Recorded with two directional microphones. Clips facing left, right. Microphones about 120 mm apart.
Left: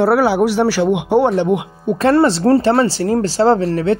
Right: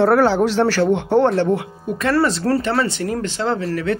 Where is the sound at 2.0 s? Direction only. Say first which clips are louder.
Left 5 dB; 30° left (ahead or behind).